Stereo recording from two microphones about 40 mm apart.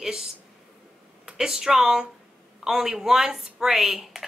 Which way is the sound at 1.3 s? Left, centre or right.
Centre.